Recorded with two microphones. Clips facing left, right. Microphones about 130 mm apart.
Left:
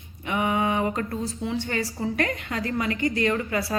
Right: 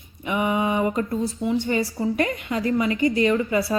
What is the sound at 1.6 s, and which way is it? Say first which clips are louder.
A woman's voice: right 5 dB; 20° right (ahead or behind).